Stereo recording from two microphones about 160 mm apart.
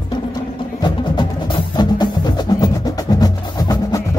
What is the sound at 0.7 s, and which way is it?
Music, 25° left (ahead or behind).